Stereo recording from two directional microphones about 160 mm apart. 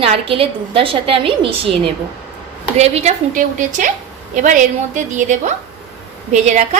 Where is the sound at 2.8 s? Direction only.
45° right (ahead or behind).